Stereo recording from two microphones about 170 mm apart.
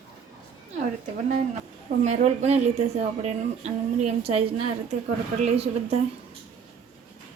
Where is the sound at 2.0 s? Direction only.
40° right (ahead or behind).